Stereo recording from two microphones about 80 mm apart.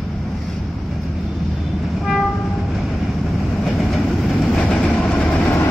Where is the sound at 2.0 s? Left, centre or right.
Centre.